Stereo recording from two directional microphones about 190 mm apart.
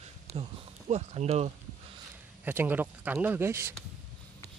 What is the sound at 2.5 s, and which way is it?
Speech, 10° right (ahead or behind).